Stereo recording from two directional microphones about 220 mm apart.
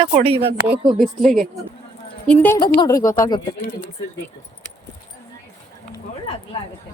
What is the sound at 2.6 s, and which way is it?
Speech, 20° left (ahead or behind).